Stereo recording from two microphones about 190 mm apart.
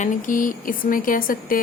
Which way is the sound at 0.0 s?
45° left (ahead or behind).